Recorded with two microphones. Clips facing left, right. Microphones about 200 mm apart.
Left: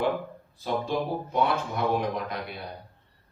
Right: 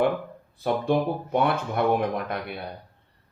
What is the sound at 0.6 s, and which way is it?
Speech, 60° right (ahead or behind).